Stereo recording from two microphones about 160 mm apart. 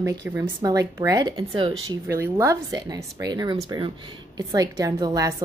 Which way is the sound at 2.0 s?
15° right (ahead or behind).